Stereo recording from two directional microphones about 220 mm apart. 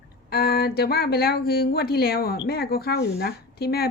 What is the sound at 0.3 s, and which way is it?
Speech, 45° left (ahead or behind).